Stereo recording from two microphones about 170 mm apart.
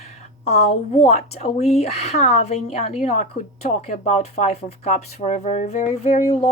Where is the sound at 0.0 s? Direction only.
40° left (ahead or behind).